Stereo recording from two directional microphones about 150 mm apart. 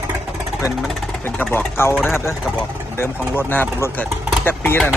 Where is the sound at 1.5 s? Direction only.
15° left (ahead or behind).